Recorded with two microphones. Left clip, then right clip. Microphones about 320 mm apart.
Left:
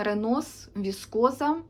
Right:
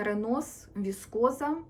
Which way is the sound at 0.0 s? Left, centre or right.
Centre.